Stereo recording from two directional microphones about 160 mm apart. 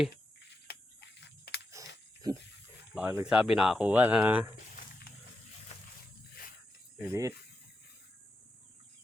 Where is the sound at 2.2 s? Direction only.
25° right (ahead or behind).